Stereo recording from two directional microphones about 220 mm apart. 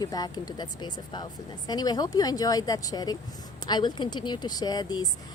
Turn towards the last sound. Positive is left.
turn(degrees=20)  # may be behind; listen again after turning